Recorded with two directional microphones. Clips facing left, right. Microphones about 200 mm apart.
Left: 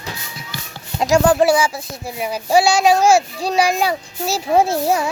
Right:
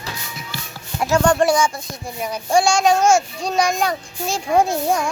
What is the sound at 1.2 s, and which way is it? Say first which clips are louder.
A child's voice: even; 5° left (ahead or behind).